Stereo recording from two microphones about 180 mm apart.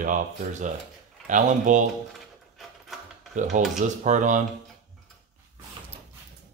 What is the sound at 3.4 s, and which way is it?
Speech, 40° right (ahead or behind).